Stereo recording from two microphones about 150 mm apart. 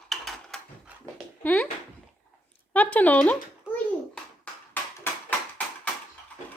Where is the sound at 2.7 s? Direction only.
10° left (ahead or behind).